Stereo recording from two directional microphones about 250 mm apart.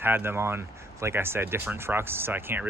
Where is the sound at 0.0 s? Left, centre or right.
Centre.